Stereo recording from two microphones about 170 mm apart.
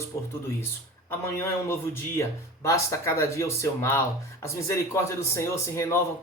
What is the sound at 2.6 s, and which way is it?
Speech, 15° left (ahead or behind).